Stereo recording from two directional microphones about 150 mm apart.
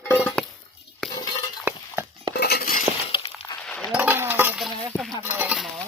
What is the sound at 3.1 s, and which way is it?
Glass, 30° left (ahead or behind).